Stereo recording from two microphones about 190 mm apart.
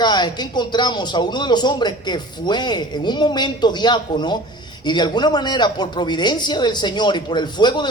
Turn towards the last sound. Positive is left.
turn(degrees=25)  # may be behind; listen again after turning